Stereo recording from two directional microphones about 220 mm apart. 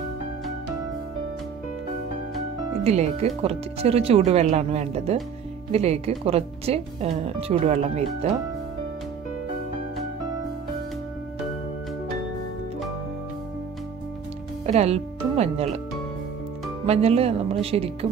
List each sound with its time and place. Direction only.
2.8 s speech: 30° right (ahead or behind)
14.7 s speech: 30° right (ahead or behind)
16.8 s speech: 30° right (ahead or behind)